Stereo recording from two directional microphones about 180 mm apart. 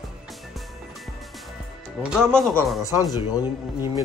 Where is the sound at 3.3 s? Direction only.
15° right (ahead or behind).